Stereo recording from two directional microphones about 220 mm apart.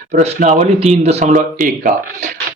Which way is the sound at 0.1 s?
30° right (ahead or behind).